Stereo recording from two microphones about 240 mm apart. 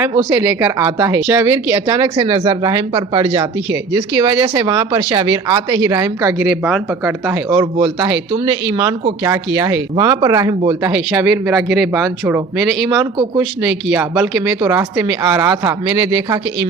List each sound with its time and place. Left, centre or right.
0.2 s speech: centre